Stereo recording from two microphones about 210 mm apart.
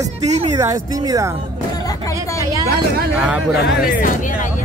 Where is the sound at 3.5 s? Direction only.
40° left (ahead or behind).